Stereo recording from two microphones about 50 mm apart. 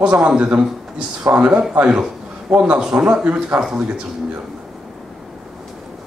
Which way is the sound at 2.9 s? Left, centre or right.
Right.